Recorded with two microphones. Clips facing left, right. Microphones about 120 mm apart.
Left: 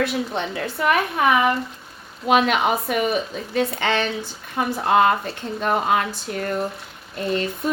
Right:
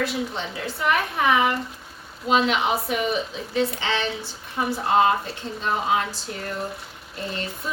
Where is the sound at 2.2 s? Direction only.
55° left (ahead or behind).